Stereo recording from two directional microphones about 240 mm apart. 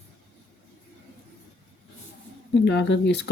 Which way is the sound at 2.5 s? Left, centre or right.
Left.